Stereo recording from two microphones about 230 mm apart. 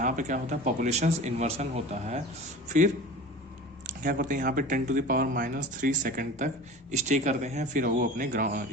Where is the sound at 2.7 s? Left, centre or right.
Right.